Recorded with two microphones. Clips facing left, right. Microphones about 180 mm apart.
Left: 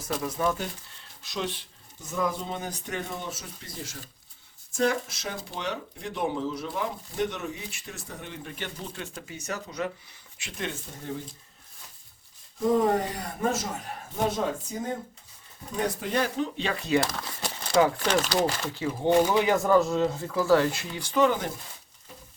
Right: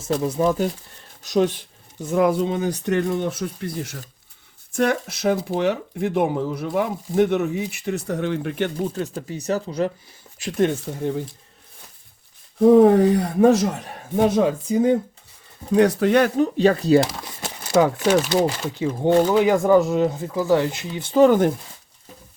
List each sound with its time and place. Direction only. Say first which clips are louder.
0.0 s speech: right 8 dB; 25° right (ahead or behind)
1.2 s speech: right 13 dB; 45° right (ahead or behind)
2.0 s speech: right 11 dB; 60° right (ahead or behind)
9.0 s speech: right 11 dB; 35° right (ahead or behind)
10.8 s speech: right 11 dB; 65° right (ahead or behind)
12.5 s speech: right 11 dB; 60° right (ahead or behind)
16.4 s speech: right 12 dB; 40° right (ahead or behind)
17.1 s crumpling: right 2 dB; 20° right (ahead or behind)
17.7 s speech: right 6 dB; 15° right (ahead or behind)
21.2 s speech: right 9 dB; 50° right (ahead or behind)